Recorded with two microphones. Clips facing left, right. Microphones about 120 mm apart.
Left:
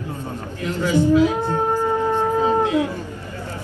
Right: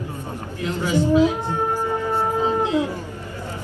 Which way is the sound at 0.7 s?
15° right (ahead or behind).